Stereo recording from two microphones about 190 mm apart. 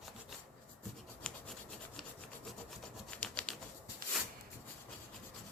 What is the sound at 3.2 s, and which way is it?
Typewriter, 5° left (ahead or behind).